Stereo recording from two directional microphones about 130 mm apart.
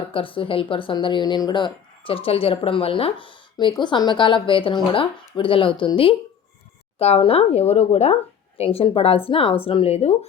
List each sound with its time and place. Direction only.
0.1 s speech: 40° left (ahead or behind)